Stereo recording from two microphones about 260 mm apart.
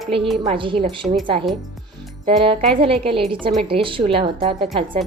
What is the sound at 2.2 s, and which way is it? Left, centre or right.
A woman's voice, right.